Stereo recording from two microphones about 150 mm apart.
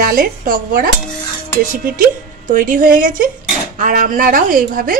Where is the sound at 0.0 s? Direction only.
70° right (ahead or behind).